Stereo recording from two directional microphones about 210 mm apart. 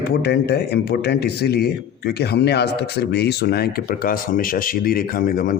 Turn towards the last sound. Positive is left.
turn(degrees=40)  # may be behind; listen again after turning